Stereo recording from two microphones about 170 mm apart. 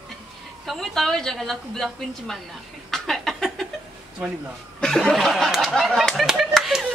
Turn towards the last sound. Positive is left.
turn(degrees=-5)  # may be behind; listen again after turning